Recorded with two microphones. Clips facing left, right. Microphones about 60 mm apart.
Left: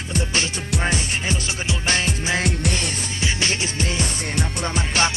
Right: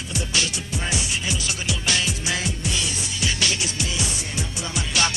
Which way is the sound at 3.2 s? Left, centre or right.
Left.